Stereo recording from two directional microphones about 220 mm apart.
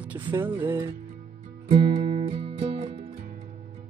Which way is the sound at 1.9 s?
25° right (ahead or behind).